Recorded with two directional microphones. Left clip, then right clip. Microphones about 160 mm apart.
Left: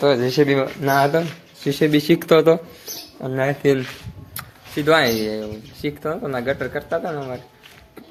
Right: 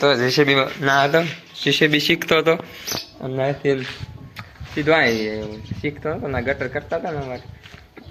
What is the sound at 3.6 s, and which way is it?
Speech, 70° left (ahead or behind).